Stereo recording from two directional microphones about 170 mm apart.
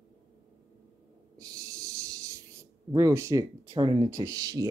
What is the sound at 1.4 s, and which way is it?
Speech, 20° right (ahead or behind).